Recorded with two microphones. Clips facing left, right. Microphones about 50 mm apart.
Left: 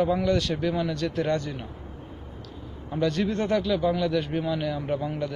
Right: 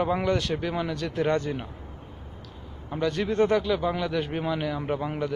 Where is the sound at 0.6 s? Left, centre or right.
Centre.